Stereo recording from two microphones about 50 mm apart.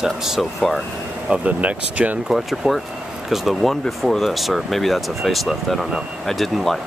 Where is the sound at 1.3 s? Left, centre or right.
Right.